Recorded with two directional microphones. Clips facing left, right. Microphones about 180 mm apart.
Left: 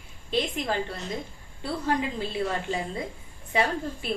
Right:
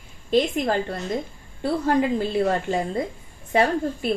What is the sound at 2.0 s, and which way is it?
A woman's voice, 50° right (ahead or behind).